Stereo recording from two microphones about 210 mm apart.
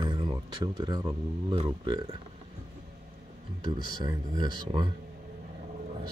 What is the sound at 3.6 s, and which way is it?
Speech, 20° right (ahead or behind).